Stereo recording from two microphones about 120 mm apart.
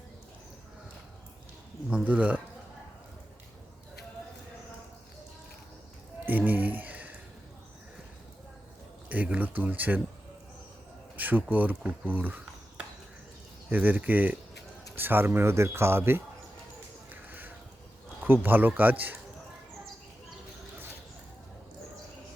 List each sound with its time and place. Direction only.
1.9 s speech: 10° right (ahead or behind)
6.2 s a sound: 15° right (ahead or behind)
9.0 s speech: 15° right (ahead or behind)
11.2 s speech: 15° right (ahead or behind)
17.1 s a sound: 15° right (ahead or behind)
18.2 s speech: 15° right (ahead or behind)